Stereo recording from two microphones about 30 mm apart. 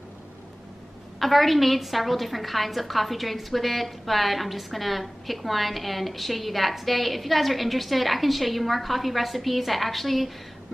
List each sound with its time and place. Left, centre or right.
1.2 s a woman's voice: centre